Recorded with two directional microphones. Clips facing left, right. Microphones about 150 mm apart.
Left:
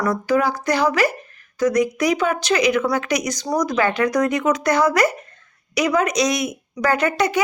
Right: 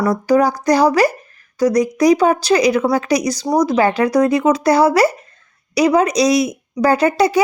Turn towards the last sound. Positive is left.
turn(degrees=-35)  # may be behind; listen again after turning